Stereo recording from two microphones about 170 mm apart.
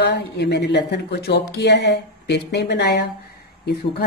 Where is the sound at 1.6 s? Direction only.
80° left.